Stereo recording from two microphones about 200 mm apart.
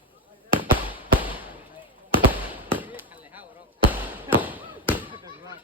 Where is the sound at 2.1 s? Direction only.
10° right (ahead or behind).